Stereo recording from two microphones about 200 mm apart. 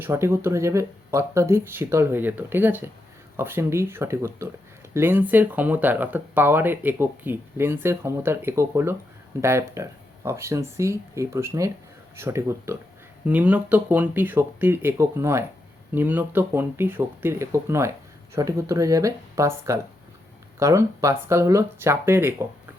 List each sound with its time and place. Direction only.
0.0 s speech: 10° right (ahead or behind)